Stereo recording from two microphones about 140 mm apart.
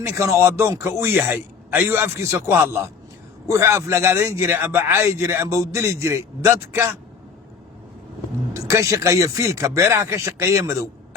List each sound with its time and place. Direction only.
0.0 s a man's voice: 20° right (ahead or behind)
8.5 s a man's voice: 20° right (ahead or behind)